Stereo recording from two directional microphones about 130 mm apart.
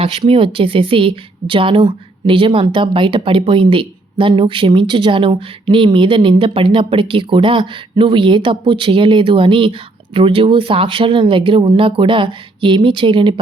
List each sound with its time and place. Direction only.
0.0 s a woman's voice: 45° right (ahead or behind)